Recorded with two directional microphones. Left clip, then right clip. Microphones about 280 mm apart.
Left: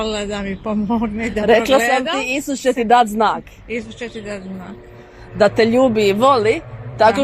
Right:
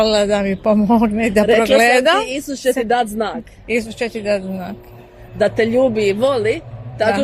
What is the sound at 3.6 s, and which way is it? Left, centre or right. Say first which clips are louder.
Speech: right 9 dB; right.